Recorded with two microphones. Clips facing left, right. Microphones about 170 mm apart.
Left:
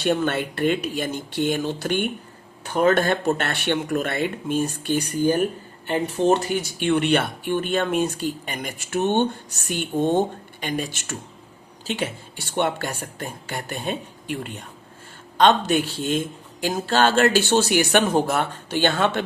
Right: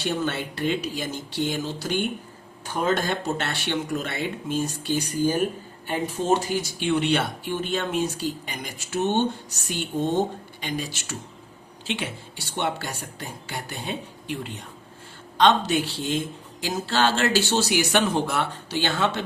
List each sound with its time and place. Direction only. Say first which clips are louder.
0.0 s speech: left 5 dB; 55° left (ahead or behind)
11.9 s speech: left 4 dB; 40° left (ahead or behind)
12.5 s speech: left 4 dB; 50° left (ahead or behind)